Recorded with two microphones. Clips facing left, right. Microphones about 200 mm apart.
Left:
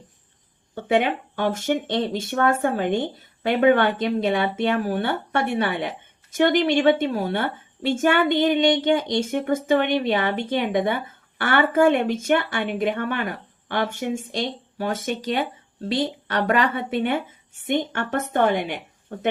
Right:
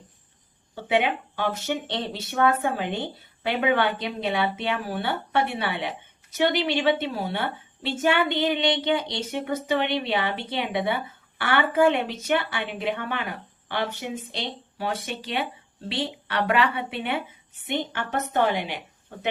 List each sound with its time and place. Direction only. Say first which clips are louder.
0.8 s speech: left 3 dB; 50° left (ahead or behind)